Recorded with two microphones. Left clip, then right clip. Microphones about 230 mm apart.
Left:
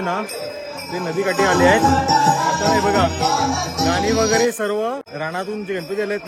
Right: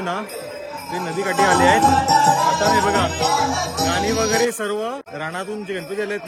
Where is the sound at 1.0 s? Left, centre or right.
Right.